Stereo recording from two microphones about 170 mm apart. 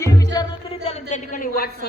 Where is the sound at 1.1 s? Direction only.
55° left (ahead or behind).